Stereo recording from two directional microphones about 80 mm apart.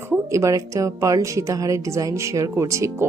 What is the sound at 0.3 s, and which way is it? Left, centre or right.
A woman's voice, right.